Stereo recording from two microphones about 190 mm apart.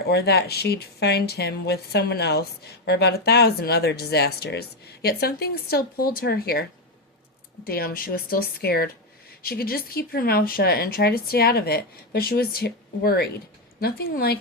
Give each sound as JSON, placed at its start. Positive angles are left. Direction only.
{"t": 0.1, "sound": "speech", "side_deg": 60}